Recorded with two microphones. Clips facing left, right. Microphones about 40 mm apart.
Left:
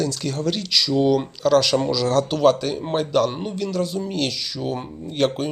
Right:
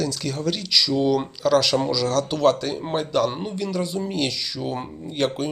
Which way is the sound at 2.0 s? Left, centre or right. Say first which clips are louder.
Left 3 dB; centre.